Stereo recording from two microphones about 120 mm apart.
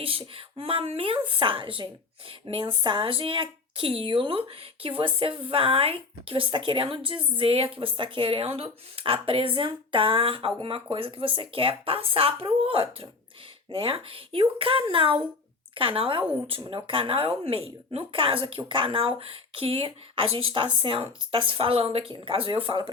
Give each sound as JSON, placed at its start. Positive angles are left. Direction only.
{"t": 0.0, "sound": "speech", "side_deg": -50}